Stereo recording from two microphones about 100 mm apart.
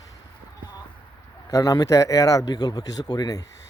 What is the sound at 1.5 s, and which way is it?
Speech, 35° left (ahead or behind).